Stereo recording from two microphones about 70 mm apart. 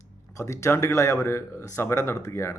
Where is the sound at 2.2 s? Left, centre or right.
Left.